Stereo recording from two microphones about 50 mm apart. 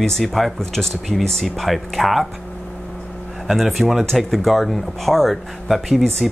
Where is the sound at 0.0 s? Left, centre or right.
Centre.